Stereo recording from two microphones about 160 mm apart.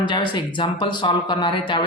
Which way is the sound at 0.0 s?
30° left (ahead or behind).